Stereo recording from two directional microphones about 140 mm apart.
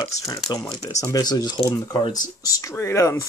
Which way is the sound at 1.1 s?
30° left (ahead or behind).